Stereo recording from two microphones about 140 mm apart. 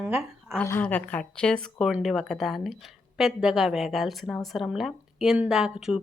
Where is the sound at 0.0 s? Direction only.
15° right (ahead or behind).